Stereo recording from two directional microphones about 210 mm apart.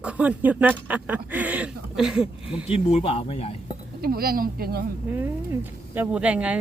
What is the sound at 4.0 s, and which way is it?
Speech, 45° right (ahead or behind).